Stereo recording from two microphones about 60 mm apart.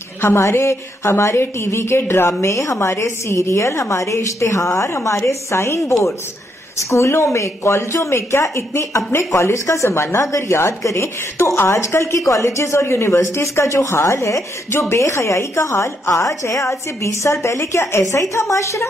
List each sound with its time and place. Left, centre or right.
0.2 s speech: left
12.2 s speech: left
12.8 s speech: left